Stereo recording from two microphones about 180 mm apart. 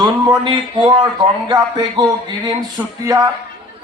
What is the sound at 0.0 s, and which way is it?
Speech, 25° right (ahead or behind).